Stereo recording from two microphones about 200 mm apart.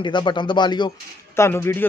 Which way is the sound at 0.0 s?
25° left (ahead or behind).